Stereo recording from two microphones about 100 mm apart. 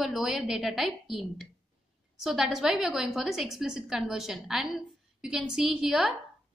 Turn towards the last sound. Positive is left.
turn(degrees=0)  # may be behind; listen again after turning